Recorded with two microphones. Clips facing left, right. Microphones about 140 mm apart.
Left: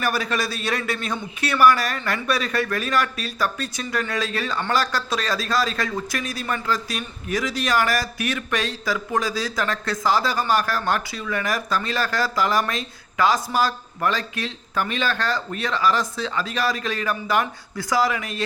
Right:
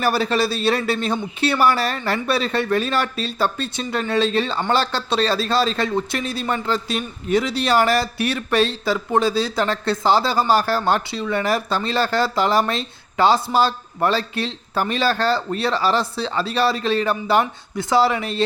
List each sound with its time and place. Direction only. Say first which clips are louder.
0.0 s speech: right 5 dB; 30° right (ahead or behind)